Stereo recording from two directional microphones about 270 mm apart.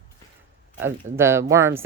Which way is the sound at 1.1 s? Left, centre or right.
Centre.